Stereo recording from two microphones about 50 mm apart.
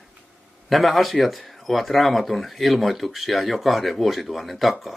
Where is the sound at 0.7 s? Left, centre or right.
Centre.